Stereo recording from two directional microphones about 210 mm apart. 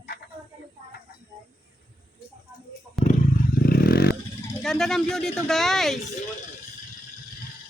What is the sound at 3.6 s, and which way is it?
Vehicle, 45° left (ahead or behind).